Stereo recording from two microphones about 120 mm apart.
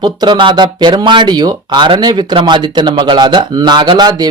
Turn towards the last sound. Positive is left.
turn(degrees=-35)  # may be behind; listen again after turning